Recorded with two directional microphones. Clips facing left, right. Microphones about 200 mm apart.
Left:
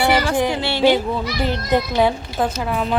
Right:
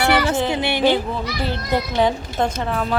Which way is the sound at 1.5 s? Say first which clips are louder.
Left 4 dB; 15° left (ahead or behind).